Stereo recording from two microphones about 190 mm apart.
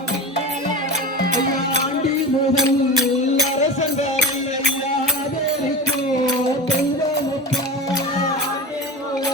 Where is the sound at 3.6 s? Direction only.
40° left (ahead or behind).